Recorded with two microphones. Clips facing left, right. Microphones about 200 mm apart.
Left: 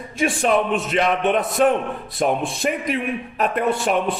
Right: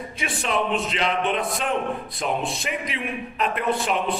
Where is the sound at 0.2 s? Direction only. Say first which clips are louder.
Left 7 dB; 50° left (ahead or behind).